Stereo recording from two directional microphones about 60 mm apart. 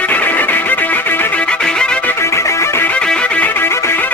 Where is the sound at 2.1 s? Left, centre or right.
Left.